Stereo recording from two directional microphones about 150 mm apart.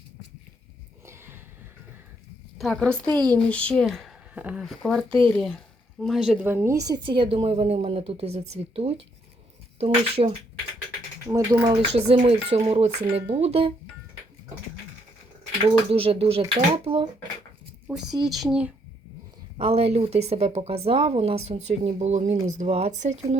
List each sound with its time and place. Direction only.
1.0 s a sound: 15° right (ahead or behind)
2.6 s speech: 5° left (ahead or behind)
4.4 s speech: 10° right (ahead or behind)
4.6 s speech: centre (ahead or behind)
5.0 s a woman's voice: 35° right (ahead or behind)
5.3 s a woman's voice: centre (ahead or behind); by 10.3 s 40° right (ahead or behind)
11.3 s speech: 20° right (ahead or behind)
11.6 s a woman's voice: 40° right (ahead or behind)
15.6 s a woman's voice: 40° right (ahead or behind)
18.2 s speech: centre (ahead or behind)
19.5 s speech: 40° right (ahead or behind)